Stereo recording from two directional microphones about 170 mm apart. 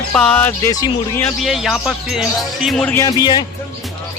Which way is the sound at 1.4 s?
Centre (ahead or behind).